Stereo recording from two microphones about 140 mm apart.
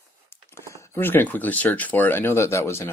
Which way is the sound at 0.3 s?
20° left (ahead or behind).